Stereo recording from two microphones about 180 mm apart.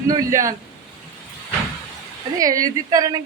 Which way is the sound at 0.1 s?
15° right (ahead or behind).